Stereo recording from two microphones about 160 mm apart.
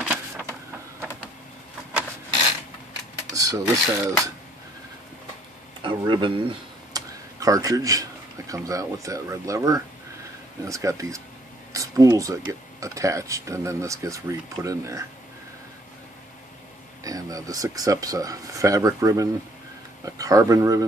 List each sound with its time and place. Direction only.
0.0 s printer: 15° right (ahead or behind)
3.3 s filing: 20° right (ahead or behind)
5.8 s speech: 30° right (ahead or behind)
7.3 s speech: 20° right (ahead or behind)
17.0 s speech: 20° right (ahead or behind)